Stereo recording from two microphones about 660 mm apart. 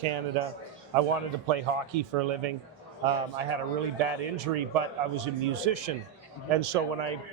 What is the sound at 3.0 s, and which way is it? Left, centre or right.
A man's voice, right.